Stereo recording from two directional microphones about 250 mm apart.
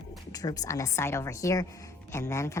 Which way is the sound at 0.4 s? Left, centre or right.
Centre.